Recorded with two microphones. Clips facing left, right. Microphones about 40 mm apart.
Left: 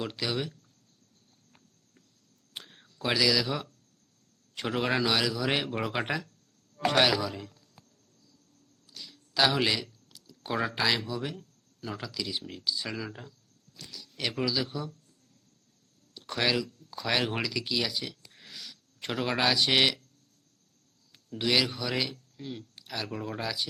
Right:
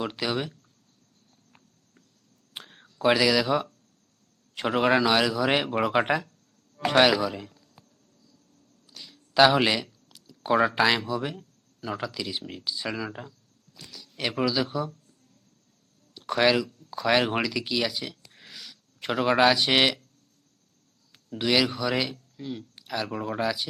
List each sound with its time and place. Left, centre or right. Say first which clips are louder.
0.0 s a man's voice: right 3 dB; right
2.5 s whispering: right 2 dB; right
3.0 s a man's voice: right 5 dB; right
8.9 s a sound: right 1 dB; right
11.9 s a man's voice: right 4 dB; right
16.1 s speech: right 6 dB; centre
18.3 s a sound: right 1 dB; centre
21.3 s speech: right 3 dB; centre
22.4 s speech: right 5 dB; centre
22.7 s a sound: right 7 dB; centre
23.0 s a man's voice: right 6 dB; right